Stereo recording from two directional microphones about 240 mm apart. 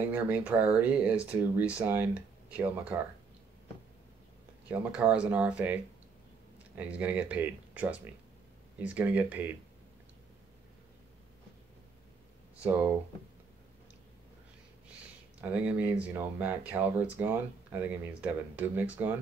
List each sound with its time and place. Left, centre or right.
0.1 s speech: centre
4.6 s speech: centre
6.8 s speech: centre
15.4 s speech: centre